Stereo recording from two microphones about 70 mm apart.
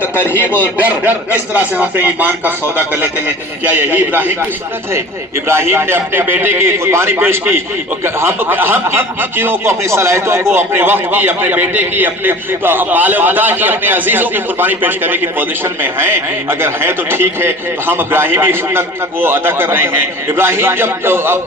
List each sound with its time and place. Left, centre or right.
0.0 s speech: left
0.5 s speech: right
3.9 s speech: right
5.5 s speech: right